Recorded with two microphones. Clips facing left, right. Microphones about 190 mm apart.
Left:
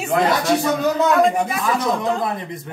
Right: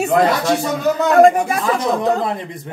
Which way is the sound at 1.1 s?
45° right (ahead or behind).